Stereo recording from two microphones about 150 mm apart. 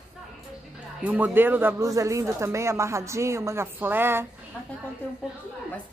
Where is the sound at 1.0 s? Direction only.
10° right (ahead or behind).